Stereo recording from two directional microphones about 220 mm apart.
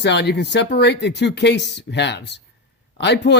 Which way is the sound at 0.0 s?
50° left (ahead or behind).